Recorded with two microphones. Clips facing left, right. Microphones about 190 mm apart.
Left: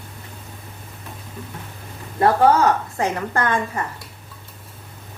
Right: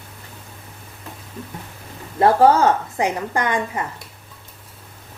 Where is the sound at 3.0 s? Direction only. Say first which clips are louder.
Even; 15° right (ahead or behind).